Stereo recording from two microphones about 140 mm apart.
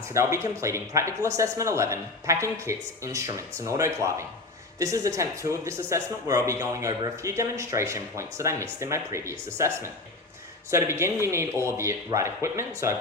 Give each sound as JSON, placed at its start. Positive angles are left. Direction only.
{"t": 0.1, "sound": "a man's voice", "side_deg": -20}